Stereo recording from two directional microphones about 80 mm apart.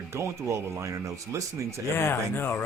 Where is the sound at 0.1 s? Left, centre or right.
Right.